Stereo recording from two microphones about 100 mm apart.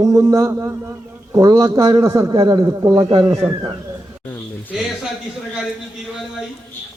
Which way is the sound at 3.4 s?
15° right (ahead or behind).